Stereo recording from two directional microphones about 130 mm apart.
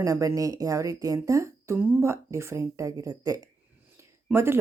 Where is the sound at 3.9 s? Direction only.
20° right (ahead or behind).